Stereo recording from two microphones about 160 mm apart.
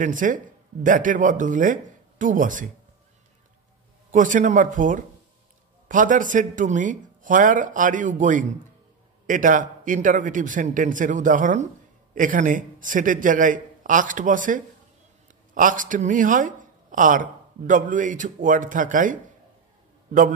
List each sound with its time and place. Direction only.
0.0 s speech: 55° right (ahead or behind)
4.1 s a man's voice: 55° right (ahead or behind)